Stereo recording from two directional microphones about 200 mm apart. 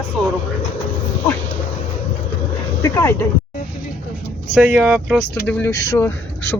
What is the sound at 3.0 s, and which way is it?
Speech, 10° left (ahead or behind).